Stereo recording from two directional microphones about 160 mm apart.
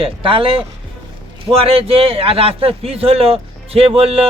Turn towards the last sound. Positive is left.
turn(degrees=-35)  # may be behind; listen again after turning